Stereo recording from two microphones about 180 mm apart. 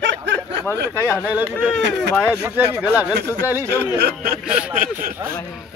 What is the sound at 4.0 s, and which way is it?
Speech, 55° right (ahead or behind).